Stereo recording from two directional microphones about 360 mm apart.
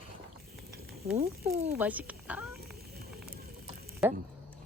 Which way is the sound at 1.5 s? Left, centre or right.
Right.